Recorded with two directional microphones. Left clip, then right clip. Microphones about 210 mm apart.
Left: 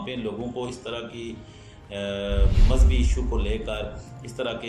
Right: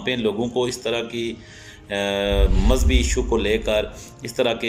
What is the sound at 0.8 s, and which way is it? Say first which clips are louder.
Speech: right 9 dB; 45° right (ahead or behind).